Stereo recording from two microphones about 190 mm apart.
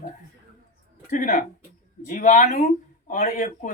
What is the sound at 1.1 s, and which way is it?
Speech, 45° left (ahead or behind).